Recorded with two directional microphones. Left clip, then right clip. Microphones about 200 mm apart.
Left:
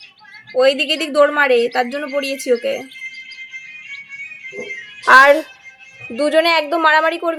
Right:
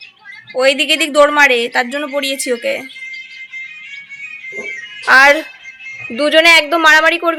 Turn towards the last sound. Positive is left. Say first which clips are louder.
# right 5 dB
turn(degrees=0)  # may be behind; listen again after turning